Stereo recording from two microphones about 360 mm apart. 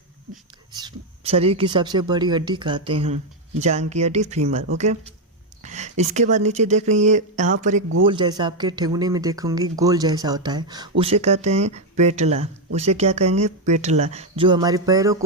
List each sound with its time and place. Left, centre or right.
0.8 s speech: centre